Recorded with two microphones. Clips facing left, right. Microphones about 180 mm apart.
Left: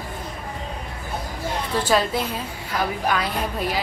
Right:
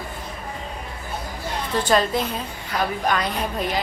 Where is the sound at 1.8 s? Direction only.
5° left (ahead or behind).